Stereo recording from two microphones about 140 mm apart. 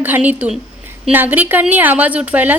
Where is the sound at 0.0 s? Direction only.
10° right (ahead or behind).